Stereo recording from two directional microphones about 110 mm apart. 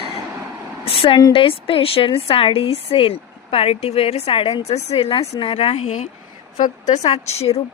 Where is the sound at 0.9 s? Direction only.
60° left (ahead or behind).